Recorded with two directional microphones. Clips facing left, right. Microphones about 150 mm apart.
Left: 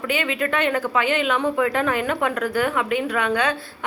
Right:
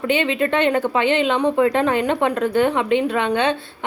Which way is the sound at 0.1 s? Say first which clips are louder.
Right 4 dB; 25° right (ahead or behind).